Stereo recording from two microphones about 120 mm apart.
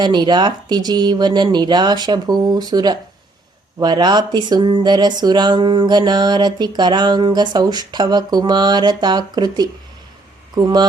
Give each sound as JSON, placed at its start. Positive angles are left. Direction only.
{"t": 0.0, "sound": "speech", "side_deg": -35}